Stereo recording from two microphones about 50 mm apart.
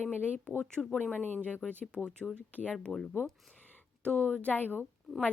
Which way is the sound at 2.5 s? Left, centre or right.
Left.